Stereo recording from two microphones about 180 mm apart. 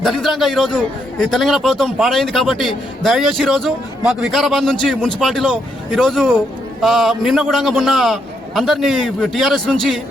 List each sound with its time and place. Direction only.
0.0 s a man's voice: centre (ahead or behind)